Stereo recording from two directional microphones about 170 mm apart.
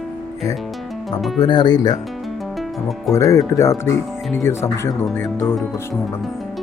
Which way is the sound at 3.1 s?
20° left (ahead or behind).